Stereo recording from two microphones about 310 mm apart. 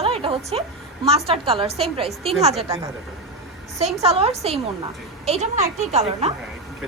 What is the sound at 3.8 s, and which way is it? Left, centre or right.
A woman's voice, centre.